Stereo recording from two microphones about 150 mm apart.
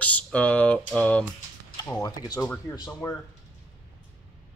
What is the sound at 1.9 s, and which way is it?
Speech, 20° left (ahead or behind).